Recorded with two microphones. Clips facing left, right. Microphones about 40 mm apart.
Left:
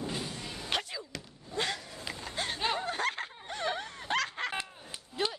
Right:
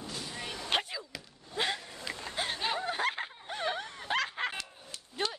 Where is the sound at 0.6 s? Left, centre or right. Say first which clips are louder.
Right 2 dB; right.